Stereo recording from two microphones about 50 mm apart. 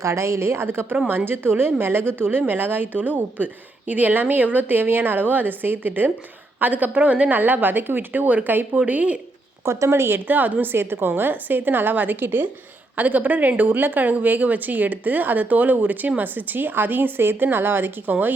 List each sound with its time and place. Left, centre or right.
0.0 s a woman's voice: right
9.6 s a woman's voice: right
10.2 s a woman's voice: right
11.1 s speech: right